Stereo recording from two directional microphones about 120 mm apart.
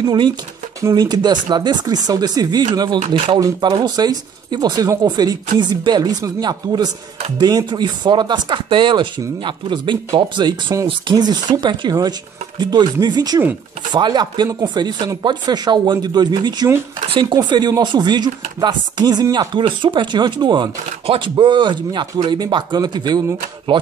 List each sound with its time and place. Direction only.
0.0 s speech: 40° right (ahead or behind)
19.5 s speech: 45° right (ahead or behind)